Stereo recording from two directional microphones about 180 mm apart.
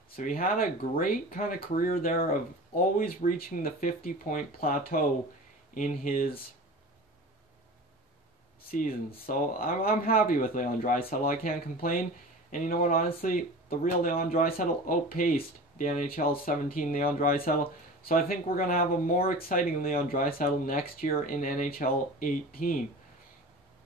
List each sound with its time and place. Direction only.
0.1 s speech: 55° left (ahead or behind)
8.6 s speech: 55° left (ahead or behind)